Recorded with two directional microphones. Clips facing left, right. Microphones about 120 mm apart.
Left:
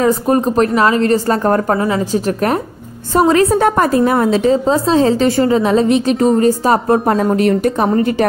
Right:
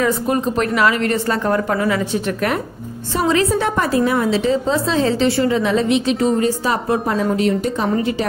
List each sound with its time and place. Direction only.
0.0 s a woman's voice: 40° left (ahead or behind)
3.2 s a woman's voice: 50° left (ahead or behind)